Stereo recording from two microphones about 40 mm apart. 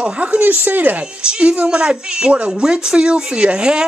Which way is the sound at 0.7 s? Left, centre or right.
Right.